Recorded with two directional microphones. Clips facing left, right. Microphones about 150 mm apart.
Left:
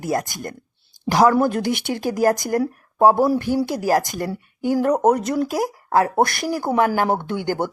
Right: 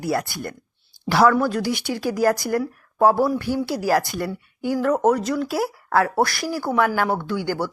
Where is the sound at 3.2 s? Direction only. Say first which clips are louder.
Left 3 dB; 35° left (ahead or behind).